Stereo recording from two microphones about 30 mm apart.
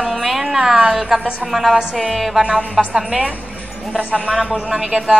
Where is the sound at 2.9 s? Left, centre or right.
Right.